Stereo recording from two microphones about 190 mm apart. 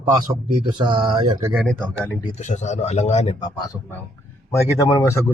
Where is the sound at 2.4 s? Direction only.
40° left (ahead or behind).